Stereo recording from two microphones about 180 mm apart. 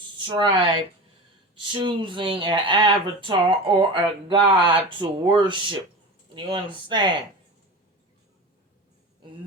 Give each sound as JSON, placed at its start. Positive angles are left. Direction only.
{"t": 0.3, "sound": "speech", "side_deg": -25}